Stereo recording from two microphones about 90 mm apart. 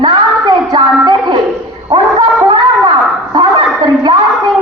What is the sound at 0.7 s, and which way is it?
Music, 55° right (ahead or behind).